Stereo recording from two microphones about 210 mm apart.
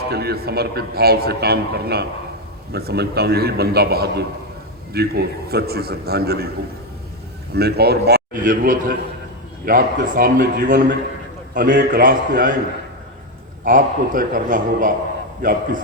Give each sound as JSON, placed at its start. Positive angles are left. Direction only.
{"t": 0.1, "sound": "a man's voice", "side_deg": -50}
{"t": 7.5, "sound": "a man's voice", "side_deg": -50}
{"t": 13.7, "sound": "a man's voice", "side_deg": -40}